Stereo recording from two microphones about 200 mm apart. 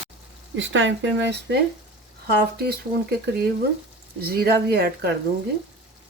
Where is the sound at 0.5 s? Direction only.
70° right (ahead or behind).